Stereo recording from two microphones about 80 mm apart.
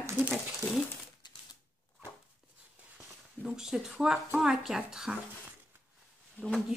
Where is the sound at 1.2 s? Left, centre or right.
Left.